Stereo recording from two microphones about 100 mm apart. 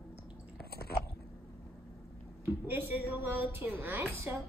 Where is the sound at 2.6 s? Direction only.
20° right (ahead or behind).